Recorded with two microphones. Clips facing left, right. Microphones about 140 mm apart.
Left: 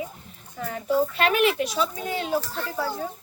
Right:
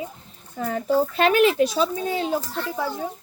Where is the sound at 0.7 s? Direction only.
30° right (ahead or behind).